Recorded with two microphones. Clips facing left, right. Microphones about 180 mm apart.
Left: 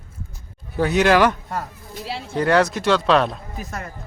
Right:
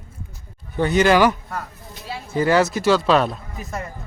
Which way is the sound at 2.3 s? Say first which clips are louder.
Even; 5° right (ahead or behind).